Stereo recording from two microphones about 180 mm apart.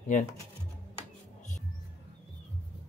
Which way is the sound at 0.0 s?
45° left (ahead or behind).